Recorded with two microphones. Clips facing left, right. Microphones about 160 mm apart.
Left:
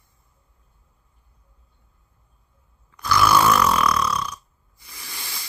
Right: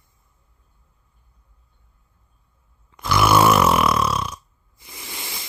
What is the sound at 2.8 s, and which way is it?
Snoring, 20° right (ahead or behind).